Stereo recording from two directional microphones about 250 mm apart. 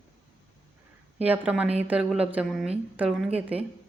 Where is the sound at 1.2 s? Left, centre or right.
Centre.